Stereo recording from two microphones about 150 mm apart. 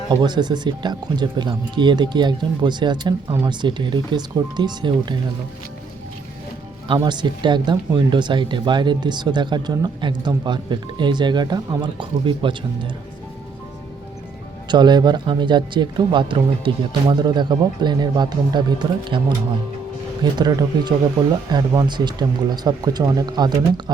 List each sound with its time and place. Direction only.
0.1 s speech: 30° right (ahead or behind)
6.8 s speech: 30° right (ahead or behind)
14.7 s speech: 30° right (ahead or behind)
20.4 s speech: 25° right (ahead or behind)